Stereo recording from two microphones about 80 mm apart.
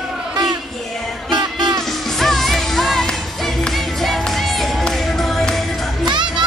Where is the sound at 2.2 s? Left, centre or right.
Centre.